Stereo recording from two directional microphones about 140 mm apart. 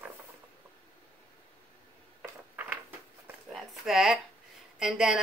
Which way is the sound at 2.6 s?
15° right (ahead or behind).